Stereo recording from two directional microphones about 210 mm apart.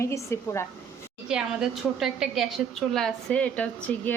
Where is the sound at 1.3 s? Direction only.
5° right (ahead or behind).